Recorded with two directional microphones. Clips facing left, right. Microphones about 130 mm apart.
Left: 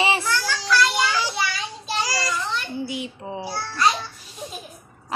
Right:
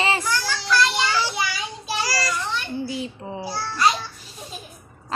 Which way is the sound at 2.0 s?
20° left (ahead or behind).